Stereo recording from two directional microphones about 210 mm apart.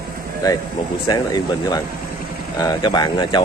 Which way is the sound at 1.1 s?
20° left (ahead or behind).